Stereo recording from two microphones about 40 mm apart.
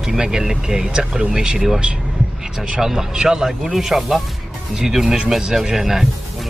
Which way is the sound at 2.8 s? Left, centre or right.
Centre.